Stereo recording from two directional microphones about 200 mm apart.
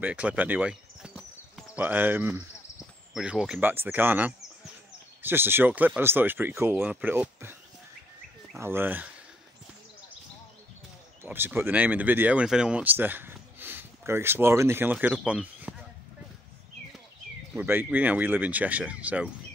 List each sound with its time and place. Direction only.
0.0 s speech: 5° right (ahead or behind)
8.5 s speech: 10° right (ahead or behind)
11.2 s speech: 10° right (ahead or behind)
17.6 s speech: 10° right (ahead or behind)